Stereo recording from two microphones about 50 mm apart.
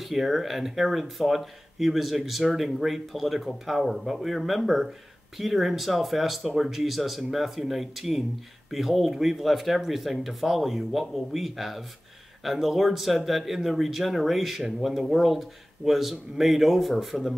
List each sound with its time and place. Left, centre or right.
0.0 s speech: centre